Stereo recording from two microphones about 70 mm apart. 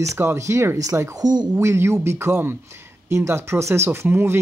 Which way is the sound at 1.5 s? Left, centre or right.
Right.